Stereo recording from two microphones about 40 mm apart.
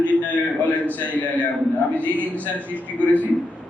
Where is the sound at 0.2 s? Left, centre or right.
Left.